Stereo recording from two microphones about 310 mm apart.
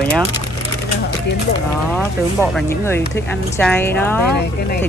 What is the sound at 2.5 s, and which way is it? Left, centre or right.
Speech, centre.